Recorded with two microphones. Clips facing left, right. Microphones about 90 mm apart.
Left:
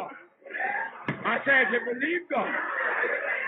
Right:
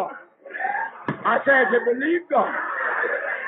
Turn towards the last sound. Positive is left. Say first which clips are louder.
# right 4 dB
turn(degrees=-40)  # may be behind; listen again after turning